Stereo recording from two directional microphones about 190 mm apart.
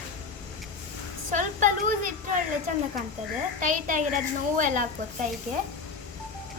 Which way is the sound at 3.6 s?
45° right (ahead or behind).